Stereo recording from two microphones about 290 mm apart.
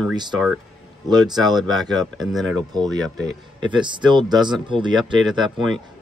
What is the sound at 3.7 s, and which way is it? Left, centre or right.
Speech, centre.